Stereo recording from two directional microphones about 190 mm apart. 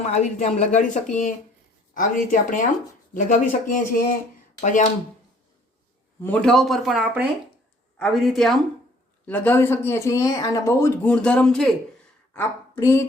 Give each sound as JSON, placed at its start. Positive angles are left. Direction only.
{"t": 0.0, "sound": "speech", "side_deg": 35}
{"t": 6.2, "sound": "a woman's voice", "side_deg": 5}